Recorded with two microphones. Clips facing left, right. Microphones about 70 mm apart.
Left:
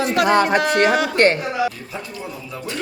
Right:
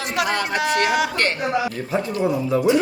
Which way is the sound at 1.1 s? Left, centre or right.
Left.